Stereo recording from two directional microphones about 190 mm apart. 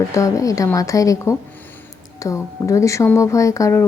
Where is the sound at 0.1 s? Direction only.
15° left (ahead or behind).